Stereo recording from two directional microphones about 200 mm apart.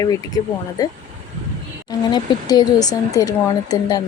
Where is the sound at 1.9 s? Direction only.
20° left (ahead or behind).